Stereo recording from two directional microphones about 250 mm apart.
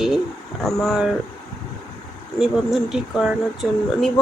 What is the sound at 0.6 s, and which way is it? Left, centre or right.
Speech, centre.